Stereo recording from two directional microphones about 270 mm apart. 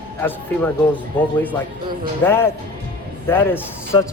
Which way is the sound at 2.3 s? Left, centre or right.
Centre.